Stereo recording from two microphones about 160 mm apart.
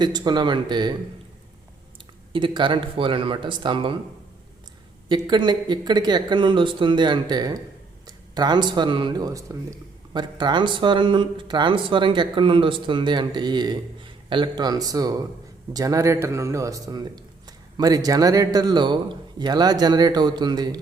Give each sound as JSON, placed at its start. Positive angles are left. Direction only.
{"t": 0.0, "sound": "speech", "side_deg": -25}
{"t": 2.3, "sound": "speech", "side_deg": -30}
{"t": 5.0, "sound": "speech", "side_deg": -30}